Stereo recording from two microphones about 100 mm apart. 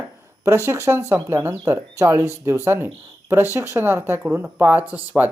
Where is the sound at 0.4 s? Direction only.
25° right (ahead or behind).